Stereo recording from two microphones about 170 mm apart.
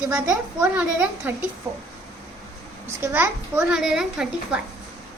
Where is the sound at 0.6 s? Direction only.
10° right (ahead or behind).